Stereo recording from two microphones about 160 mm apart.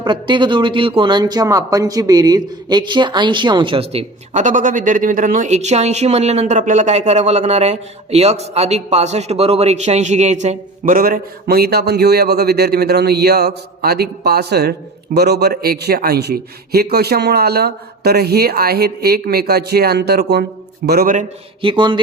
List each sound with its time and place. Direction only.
0.0 s speech: 30° right (ahead or behind); by 21.2 s 75° right (ahead or behind)
21.6 s speech: 30° right (ahead or behind)